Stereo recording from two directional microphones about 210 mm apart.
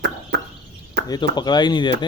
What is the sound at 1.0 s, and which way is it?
Speech, 20° left (ahead or behind).